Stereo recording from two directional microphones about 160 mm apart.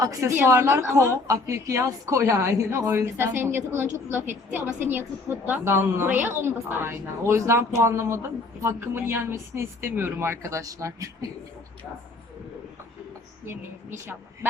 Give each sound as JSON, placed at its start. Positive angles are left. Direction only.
{"t": 0.0, "sound": "a woman's voice", "side_deg": -20}